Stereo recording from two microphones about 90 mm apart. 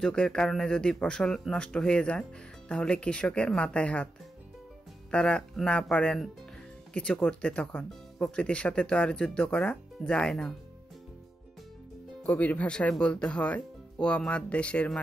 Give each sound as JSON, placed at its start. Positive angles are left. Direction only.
{"t": 0.0, "sound": "speech", "side_deg": 10}
{"t": 5.1, "sound": "speech", "side_deg": 10}
{"t": 12.2, "sound": "speech", "side_deg": 15}